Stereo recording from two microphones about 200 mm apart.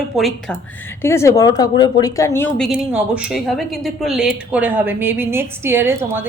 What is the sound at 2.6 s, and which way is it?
Speech, 5° right (ahead or behind).